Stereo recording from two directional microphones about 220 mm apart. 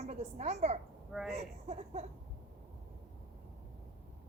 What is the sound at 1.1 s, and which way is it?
Speech, centre (ahead or behind).